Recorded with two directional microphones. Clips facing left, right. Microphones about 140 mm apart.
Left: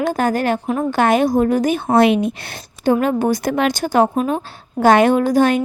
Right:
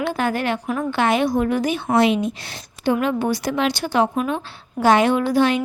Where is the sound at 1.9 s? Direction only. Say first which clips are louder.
Left 4 dB; 60° left (ahead or behind).